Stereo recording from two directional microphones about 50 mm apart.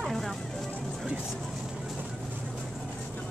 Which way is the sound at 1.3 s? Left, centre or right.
Centre.